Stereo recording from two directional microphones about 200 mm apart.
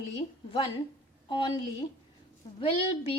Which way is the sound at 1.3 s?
25° left (ahead or behind).